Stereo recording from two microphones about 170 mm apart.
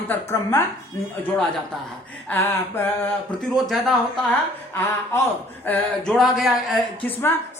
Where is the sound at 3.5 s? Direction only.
Centre (ahead or behind).